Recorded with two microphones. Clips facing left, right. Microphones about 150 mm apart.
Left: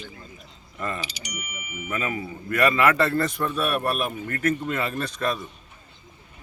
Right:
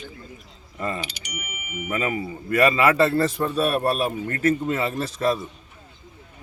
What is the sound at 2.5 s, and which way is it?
A man's voice, 30° right (ahead or behind).